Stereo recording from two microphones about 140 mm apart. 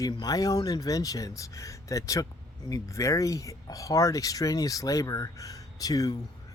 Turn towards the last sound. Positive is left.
turn(degrees=25)  # may be behind; listen again after turning